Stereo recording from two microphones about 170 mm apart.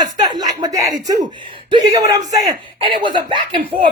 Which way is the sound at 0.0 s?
25° right (ahead or behind).